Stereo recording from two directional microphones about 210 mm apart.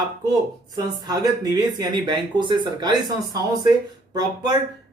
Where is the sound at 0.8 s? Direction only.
20° right (ahead or behind).